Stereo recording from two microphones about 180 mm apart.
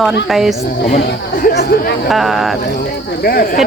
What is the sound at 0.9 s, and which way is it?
Speech, 60° left (ahead or behind).